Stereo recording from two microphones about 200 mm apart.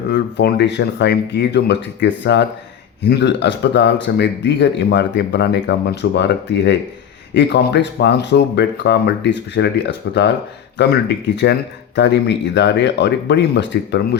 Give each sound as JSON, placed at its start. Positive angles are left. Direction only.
{"t": 0.1, "sound": "speech", "side_deg": 55}
{"t": 11.4, "sound": "speech", "side_deg": 55}